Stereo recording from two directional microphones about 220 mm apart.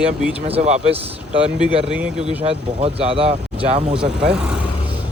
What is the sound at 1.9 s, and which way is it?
Speech, 5° right (ahead or behind).